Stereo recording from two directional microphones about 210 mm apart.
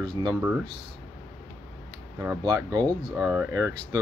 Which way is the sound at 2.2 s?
20° right (ahead or behind).